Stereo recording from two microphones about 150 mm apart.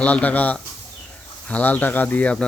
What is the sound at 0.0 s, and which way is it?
Speech, 10° left (ahead or behind).